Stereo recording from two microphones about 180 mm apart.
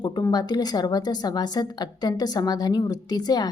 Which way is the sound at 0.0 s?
20° left (ahead or behind).